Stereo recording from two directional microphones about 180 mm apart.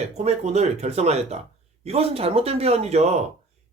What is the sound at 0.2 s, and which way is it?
Speech, 40° right (ahead or behind).